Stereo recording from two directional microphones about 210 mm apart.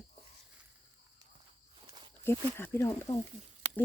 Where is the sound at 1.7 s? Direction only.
20° right (ahead or behind).